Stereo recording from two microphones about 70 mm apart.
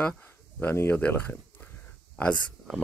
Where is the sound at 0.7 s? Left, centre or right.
Left.